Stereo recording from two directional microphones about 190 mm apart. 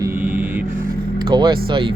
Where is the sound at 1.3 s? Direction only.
25° right (ahead or behind).